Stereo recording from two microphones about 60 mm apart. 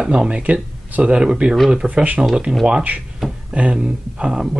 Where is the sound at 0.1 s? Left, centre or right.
Centre.